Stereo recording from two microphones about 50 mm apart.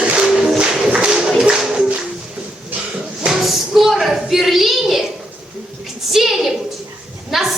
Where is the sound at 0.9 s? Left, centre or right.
Centre.